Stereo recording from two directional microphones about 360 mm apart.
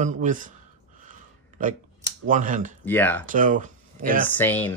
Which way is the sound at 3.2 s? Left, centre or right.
Right.